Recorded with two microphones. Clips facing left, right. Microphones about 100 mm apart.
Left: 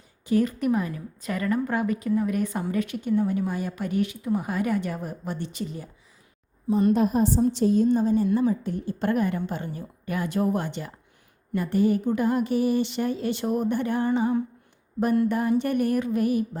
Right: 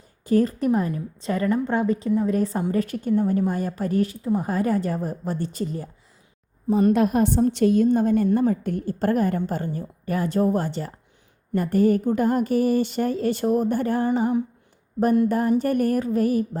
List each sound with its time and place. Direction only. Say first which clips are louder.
0.3 s a woman's voice: right 3 dB; 35° right (ahead or behind)
6.7 s a woman's voice: right 2 dB; 55° right (ahead or behind)
7.0 s a woman's voice: right 2 dB; 70° right (ahead or behind); by 14.0 s 40° right (ahead or behind)
15.3 s a woman's voice: right 3 dB; 40° right (ahead or behind)